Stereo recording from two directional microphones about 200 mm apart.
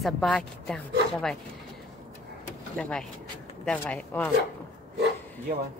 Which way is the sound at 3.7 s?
5° left (ahead or behind).